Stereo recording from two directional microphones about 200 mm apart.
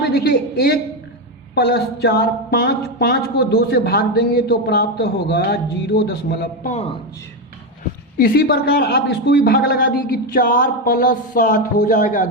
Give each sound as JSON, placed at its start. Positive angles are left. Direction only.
{"t": 0.0, "sound": "speech", "side_deg": 55}
{"t": 8.2, "sound": "speech", "side_deg": 50}